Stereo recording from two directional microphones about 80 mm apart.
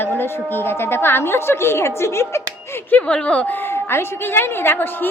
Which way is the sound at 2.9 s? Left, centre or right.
Centre.